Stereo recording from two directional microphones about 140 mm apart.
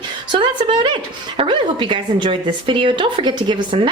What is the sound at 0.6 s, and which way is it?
A woman's voice, 30° right (ahead or behind).